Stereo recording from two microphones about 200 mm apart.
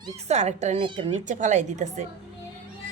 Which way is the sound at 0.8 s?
25° right (ahead or behind).